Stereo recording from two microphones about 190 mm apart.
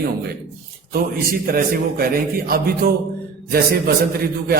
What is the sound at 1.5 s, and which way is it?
A man's voice, 50° right (ahead or behind).